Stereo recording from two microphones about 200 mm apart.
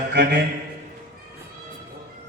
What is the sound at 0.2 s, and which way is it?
Speech, 60° right (ahead or behind).